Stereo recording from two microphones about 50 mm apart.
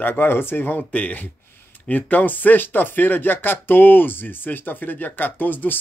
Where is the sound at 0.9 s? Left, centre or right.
Left.